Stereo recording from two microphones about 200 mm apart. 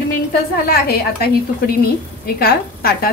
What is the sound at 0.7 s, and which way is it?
A woman's voice, 50° left (ahead or behind).